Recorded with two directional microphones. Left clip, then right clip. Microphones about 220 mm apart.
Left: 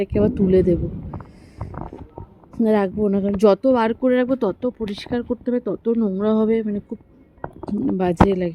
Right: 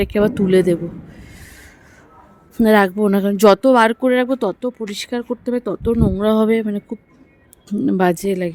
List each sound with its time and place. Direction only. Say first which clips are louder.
0.0 s a woman's voice: right 3 dB; 25° right (ahead or behind)
2.6 s a woman's voice: right 5 dB; 30° right (ahead or behind)
8.3 s speech: right 1 dB; 15° right (ahead or behind)